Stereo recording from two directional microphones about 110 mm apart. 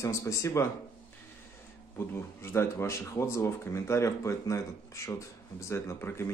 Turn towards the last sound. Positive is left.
turn(degrees=20)  # may be behind; listen again after turning